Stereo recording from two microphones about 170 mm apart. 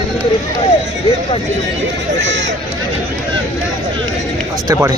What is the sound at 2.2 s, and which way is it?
Speech, 90° right.